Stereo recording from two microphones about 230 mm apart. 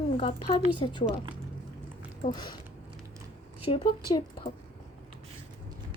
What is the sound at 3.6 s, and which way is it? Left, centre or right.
Speech, left.